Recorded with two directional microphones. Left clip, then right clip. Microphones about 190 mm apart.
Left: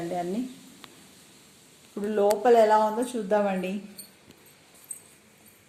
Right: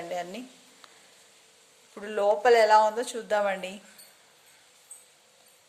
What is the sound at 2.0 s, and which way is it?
Speech, 40° right (ahead or behind).